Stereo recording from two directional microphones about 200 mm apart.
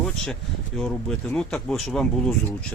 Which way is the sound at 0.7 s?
5° left (ahead or behind).